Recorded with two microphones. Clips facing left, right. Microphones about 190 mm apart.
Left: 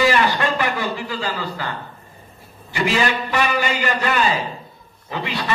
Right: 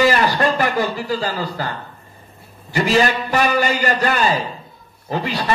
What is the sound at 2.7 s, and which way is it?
A man's voice, 40° right (ahead or behind).